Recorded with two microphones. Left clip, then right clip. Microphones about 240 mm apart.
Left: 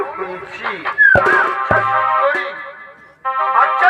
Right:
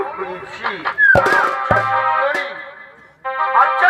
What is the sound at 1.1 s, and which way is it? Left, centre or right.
Music, right.